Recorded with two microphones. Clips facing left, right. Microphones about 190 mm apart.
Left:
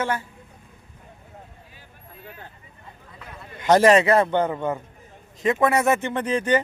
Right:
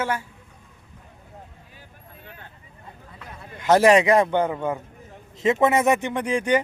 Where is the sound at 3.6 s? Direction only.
10° right (ahead or behind).